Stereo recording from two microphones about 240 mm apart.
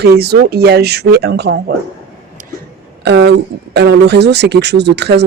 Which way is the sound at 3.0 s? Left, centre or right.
Right.